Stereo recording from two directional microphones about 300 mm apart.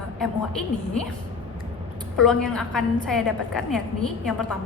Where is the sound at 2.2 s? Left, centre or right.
Centre.